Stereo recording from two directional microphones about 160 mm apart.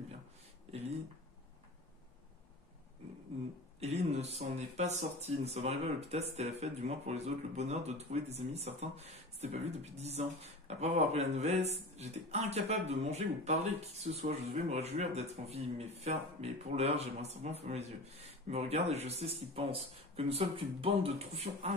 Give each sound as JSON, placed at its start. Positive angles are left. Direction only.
{"t": 0.7, "sound": "speech", "side_deg": -40}
{"t": 3.8, "sound": "speech", "side_deg": -40}